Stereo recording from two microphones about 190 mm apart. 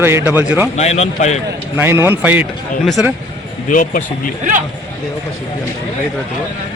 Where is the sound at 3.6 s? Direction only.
45° left (ahead or behind).